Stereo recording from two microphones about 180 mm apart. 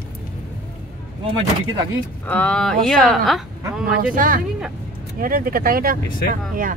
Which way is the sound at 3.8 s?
50° right (ahead or behind).